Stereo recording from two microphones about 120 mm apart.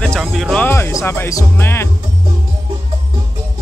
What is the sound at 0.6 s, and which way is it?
Speech, 20° left (ahead or behind).